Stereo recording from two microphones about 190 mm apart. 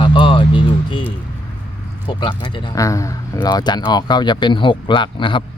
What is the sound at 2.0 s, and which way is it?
Speech, 25° left (ahead or behind).